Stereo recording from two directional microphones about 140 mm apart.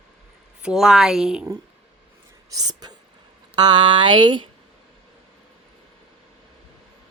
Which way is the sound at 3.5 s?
35° right (ahead or behind).